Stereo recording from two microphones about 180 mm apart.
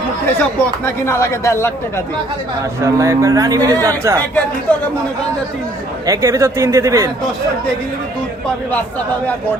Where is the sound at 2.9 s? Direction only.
15° right (ahead or behind).